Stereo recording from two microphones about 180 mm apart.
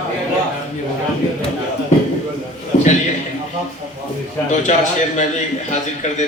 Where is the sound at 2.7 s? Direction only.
40° left (ahead or behind).